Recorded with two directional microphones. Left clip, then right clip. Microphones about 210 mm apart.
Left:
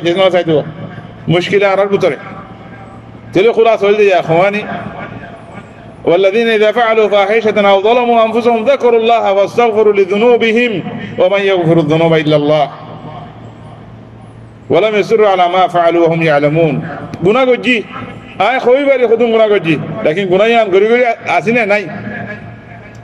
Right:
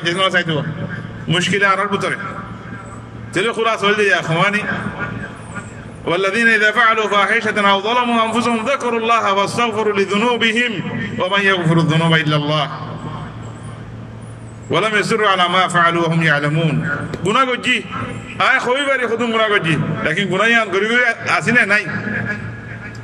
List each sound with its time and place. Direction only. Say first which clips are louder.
0.0 s a man's voice: left 6 dB; 15° left (ahead or behind)
3.3 s a man's voice: left 9 dB; 15° left (ahead or behind)
6.0 s a man's voice: left 5 dB; 15° left (ahead or behind)
14.7 s a man's voice: left 6 dB; 15° left (ahead or behind)